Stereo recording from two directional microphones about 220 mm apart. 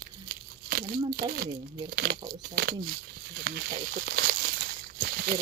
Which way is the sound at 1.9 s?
45° right (ahead or behind).